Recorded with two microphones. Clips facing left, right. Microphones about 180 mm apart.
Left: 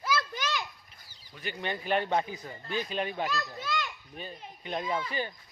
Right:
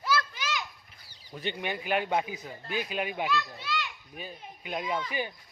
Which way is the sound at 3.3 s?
45° left (ahead or behind).